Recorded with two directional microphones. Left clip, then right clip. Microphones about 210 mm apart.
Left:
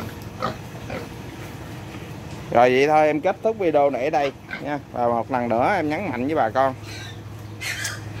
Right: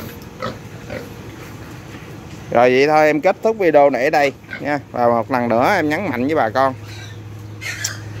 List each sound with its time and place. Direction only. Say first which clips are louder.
2.5 s speech: right 3 dB; 15° right (ahead or behind)